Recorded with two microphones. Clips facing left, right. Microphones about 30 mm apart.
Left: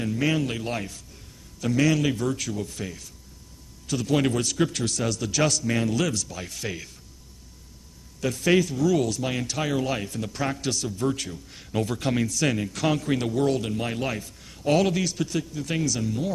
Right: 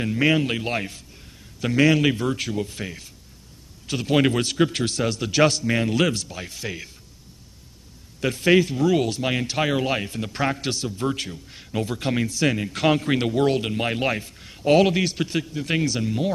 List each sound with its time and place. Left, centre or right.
0.0 s speech: right; by 6.9 s centre
8.2 s speech: right
11.3 s a man's voice: centre
12.7 s a man's voice: right